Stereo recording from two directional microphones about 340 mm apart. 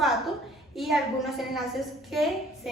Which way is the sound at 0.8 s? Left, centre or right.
Centre.